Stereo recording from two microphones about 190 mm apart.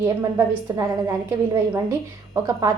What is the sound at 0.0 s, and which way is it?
A woman's voice, 15° right (ahead or behind).